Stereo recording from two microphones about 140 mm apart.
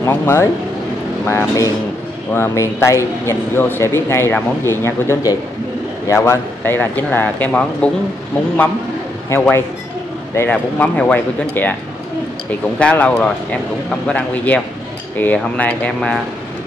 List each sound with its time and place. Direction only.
0.0 s speech: 15° left (ahead or behind)
9.3 s speech: 15° left (ahead or behind)